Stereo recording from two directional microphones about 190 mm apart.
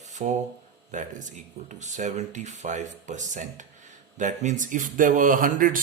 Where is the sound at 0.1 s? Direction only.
40° right (ahead or behind).